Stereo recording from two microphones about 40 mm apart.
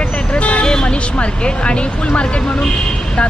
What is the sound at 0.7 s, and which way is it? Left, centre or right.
Music, centre.